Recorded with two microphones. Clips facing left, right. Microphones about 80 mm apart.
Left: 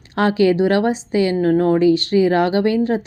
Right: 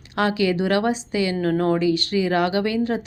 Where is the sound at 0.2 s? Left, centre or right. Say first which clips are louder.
Left 6 dB; left.